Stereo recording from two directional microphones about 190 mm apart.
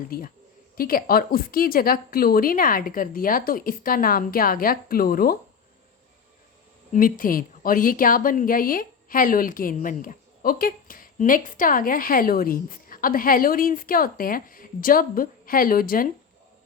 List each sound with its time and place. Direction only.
0.1 s a woman's voice: 50° left (ahead or behind)
6.9 s a woman's voice: 45° left (ahead or behind)